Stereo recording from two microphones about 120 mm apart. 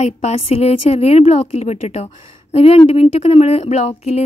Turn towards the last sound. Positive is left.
turn(degrees=65)  # may be behind; listen again after turning